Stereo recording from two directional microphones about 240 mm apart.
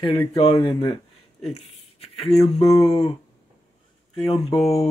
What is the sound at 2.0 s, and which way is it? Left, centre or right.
Speech, left.